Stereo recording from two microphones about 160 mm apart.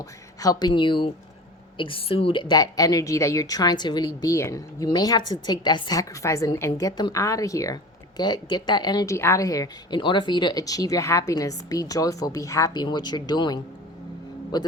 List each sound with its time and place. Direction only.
0.0 s a woman's voice: 20° left (ahead or behind)